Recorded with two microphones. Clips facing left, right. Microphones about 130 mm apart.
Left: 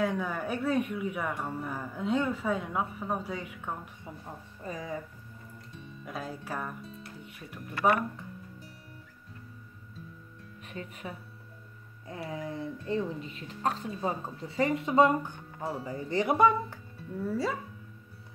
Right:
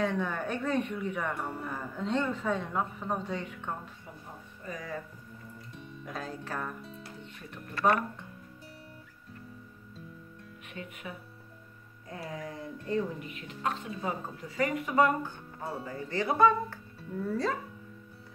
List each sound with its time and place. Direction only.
0.0 s speech: 10° left (ahead or behind)
4.6 s speech: 20° left (ahead or behind)
6.0 s speech: 5° left (ahead or behind)
10.7 s speech: 35° left (ahead or behind)
12.4 s speech: 25° left (ahead or behind)